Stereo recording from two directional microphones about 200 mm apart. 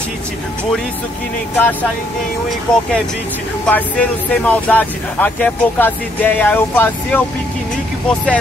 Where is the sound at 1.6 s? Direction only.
10° left (ahead or behind).